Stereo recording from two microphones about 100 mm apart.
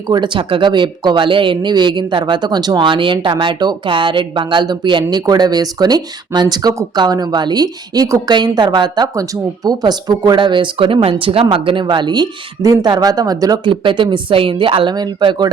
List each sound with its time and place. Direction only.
0.1 s speech: 50° right (ahead or behind)
5.2 s speech: 40° right (ahead or behind)
8.3 s speech: 45° right (ahead or behind)
9.1 s speech: 35° right (ahead or behind)
13.7 s a woman's voice: 55° right (ahead or behind)